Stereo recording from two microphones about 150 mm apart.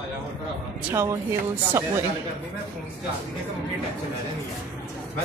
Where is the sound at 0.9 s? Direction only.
20° right (ahead or behind).